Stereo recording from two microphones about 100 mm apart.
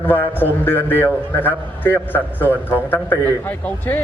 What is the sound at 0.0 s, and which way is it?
A man's voice, 20° left (ahead or behind).